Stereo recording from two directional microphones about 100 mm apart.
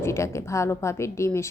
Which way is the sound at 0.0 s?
30° left (ahead or behind).